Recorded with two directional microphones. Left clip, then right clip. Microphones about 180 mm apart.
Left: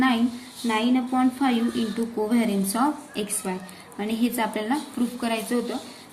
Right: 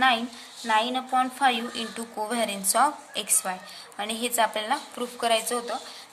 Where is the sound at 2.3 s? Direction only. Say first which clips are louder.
Left 2 dB; 40° right (ahead or behind).